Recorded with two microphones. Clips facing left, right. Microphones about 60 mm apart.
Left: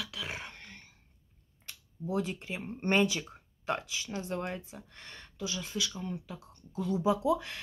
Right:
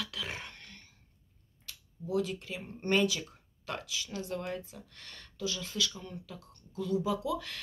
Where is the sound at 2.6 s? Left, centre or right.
Left.